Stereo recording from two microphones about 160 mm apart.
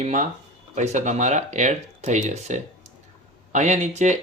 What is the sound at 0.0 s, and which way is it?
Speech, 45° right (ahead or behind).